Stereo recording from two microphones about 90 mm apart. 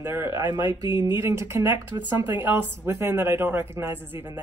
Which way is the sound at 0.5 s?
60° left (ahead or behind).